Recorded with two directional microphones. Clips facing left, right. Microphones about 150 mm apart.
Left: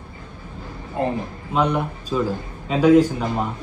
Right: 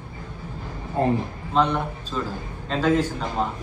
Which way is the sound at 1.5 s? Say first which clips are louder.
Left 1 dB; 10° left (ahead or behind).